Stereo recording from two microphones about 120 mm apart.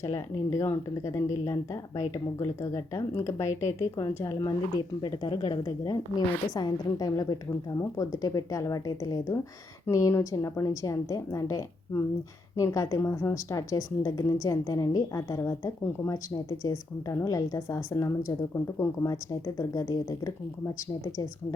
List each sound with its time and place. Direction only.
0.0 s a woman's voice: 25° left (ahead or behind)
5.0 s a woman's voice: 40° left (ahead or behind)